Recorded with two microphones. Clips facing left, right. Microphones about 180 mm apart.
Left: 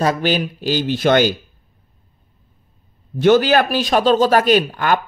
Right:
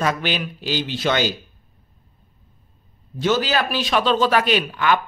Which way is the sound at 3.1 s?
60° left (ahead or behind).